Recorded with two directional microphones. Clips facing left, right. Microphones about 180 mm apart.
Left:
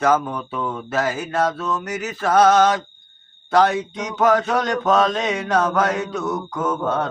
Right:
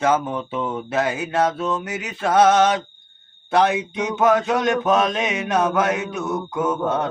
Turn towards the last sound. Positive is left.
turn(degrees=-15)  # may be behind; listen again after turning